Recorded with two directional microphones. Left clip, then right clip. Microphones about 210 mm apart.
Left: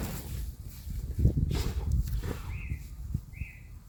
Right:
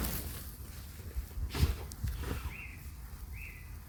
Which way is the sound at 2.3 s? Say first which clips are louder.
Left 2 dB; 15° left (ahead or behind).